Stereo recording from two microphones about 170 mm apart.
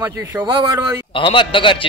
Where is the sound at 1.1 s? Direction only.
30° left (ahead or behind).